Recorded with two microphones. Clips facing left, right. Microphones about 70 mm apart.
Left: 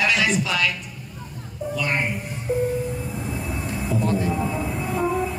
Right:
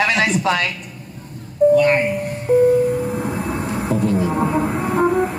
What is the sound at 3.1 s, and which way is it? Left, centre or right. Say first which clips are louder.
Vehicle: right 7 dB; right.